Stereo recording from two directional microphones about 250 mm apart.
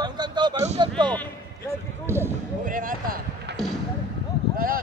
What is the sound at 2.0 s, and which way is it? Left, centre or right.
Speech, centre.